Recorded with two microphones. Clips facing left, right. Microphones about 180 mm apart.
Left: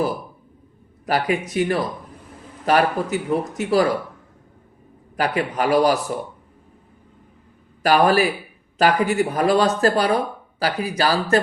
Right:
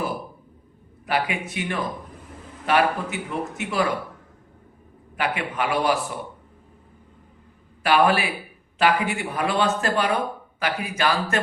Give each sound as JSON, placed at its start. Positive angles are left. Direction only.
{"t": 1.0, "sound": "speech", "side_deg": 40}
{"t": 5.1, "sound": "speech", "side_deg": 40}
{"t": 7.8, "sound": "speech", "side_deg": 40}